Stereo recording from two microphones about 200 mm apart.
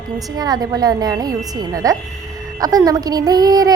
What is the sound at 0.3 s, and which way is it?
A woman's voice, 20° right (ahead or behind).